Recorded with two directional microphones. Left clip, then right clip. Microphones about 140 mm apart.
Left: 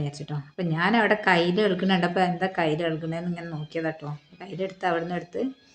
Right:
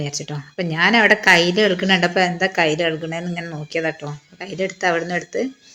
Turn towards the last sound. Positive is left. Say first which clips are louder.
# right 7 dB
turn(degrees=-15)  # may be behind; listen again after turning